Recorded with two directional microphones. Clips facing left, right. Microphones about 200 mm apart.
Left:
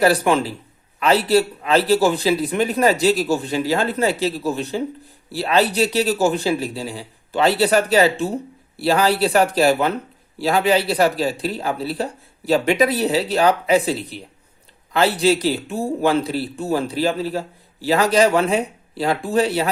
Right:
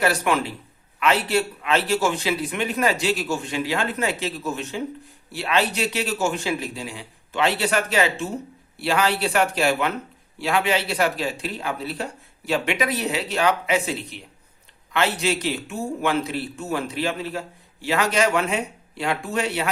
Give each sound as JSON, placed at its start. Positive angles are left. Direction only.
{"t": 0.0, "sound": "a man's voice", "side_deg": 35}